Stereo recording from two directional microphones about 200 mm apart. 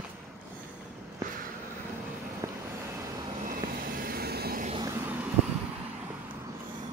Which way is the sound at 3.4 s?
45° right (ahead or behind).